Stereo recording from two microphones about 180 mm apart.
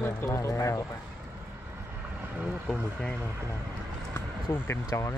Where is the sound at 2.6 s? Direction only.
5° left (ahead or behind).